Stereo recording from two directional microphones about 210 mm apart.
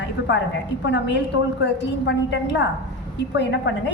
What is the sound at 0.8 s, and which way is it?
A woman's voice, 60° left (ahead or behind).